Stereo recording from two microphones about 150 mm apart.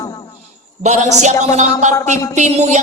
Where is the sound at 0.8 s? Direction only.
50° right (ahead or behind).